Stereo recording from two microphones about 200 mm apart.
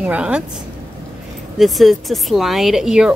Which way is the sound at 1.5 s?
Centre (ahead or behind).